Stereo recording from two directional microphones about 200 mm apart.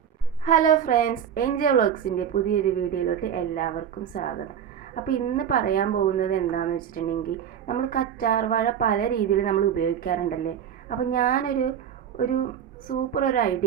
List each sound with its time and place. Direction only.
0.4 s a woman's voice: 40° left (ahead or behind)